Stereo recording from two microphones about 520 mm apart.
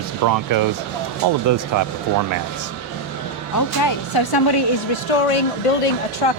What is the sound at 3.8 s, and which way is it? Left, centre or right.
Speech, left.